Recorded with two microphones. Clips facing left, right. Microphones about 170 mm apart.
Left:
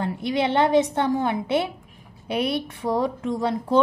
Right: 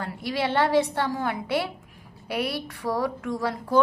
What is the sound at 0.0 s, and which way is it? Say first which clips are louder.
A woman's voice: left 4 dB; 20° left (ahead or behind).